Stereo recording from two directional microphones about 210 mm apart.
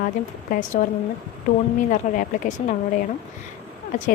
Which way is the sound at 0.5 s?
40° left (ahead or behind).